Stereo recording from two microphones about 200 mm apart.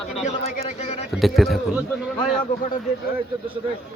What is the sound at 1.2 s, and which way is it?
Speech, centre (ahead or behind).